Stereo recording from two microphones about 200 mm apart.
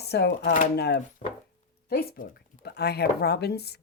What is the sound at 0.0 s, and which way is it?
Speech, 55° left (ahead or behind).